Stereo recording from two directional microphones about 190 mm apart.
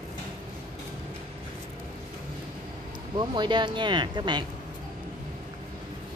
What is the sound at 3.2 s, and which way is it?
Speech, 25° right (ahead or behind).